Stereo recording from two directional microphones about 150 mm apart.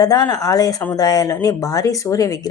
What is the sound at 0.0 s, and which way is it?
A woman's voice, 25° left (ahead or behind).